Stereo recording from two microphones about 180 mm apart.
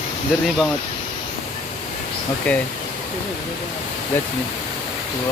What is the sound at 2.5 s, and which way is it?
Speech, 5° left (ahead or behind).